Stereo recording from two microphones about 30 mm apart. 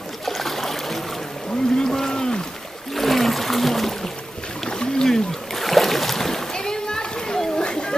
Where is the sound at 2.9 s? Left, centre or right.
Centre.